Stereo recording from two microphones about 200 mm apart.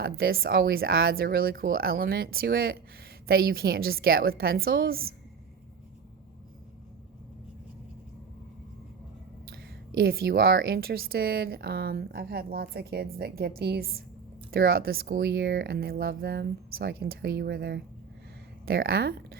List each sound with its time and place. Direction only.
0.0 s speech: 50° right (ahead or behind)
9.5 s speech: 50° right (ahead or behind)